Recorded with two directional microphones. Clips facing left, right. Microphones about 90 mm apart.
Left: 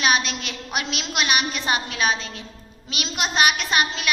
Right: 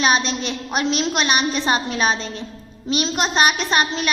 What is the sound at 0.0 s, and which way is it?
A woman's voice, 30° right (ahead or behind).